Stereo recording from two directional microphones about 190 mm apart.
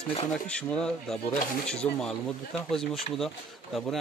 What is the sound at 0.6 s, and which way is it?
Speech, 5° left (ahead or behind).